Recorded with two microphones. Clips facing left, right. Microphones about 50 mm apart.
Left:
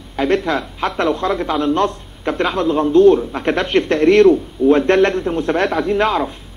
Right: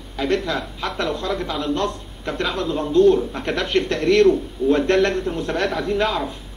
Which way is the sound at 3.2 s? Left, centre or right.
Left.